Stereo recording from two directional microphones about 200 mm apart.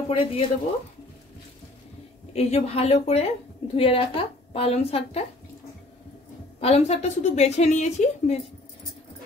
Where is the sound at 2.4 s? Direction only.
30° left (ahead or behind).